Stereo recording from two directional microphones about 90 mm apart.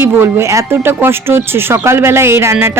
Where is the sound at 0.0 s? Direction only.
30° right (ahead or behind).